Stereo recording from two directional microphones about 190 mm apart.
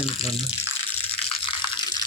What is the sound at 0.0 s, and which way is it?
Speech, 30° left (ahead or behind).